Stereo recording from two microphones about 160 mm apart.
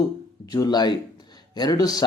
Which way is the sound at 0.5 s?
25° left (ahead or behind).